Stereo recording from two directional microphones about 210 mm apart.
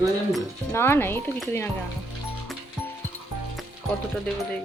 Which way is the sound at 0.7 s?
10° left (ahead or behind).